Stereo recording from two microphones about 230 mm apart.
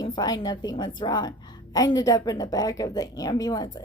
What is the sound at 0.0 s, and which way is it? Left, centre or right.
A woman's voice, centre.